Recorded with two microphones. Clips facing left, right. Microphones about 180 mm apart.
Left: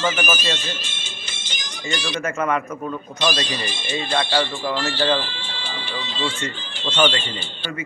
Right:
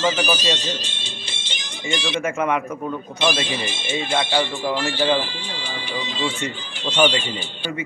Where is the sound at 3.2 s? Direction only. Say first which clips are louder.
Right 1 dB; 25° right (ahead or behind).